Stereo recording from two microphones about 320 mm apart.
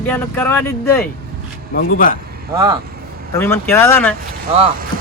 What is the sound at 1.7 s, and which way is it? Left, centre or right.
Speech, left.